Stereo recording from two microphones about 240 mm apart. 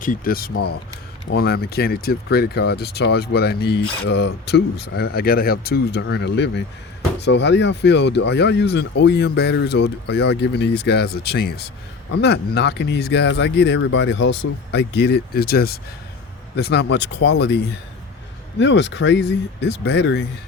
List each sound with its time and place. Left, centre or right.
0.0 s speech: left
18.6 s speech: left